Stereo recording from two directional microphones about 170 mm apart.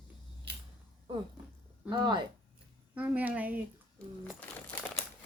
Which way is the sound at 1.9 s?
25° right (ahead or behind).